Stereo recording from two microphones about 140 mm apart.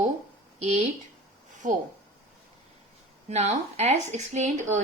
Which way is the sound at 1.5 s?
60° right (ahead or behind).